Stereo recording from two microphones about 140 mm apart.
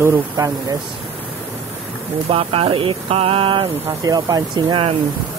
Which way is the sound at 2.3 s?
40° right (ahead or behind).